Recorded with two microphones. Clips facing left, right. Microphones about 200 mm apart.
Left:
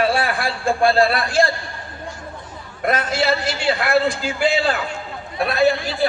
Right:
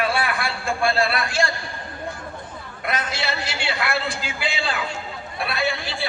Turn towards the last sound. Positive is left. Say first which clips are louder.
# left 9 dB
turn(degrees=40)  # may be behind; listen again after turning